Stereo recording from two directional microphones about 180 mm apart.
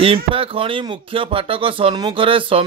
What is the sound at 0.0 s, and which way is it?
Speech, 30° right (ahead or behind).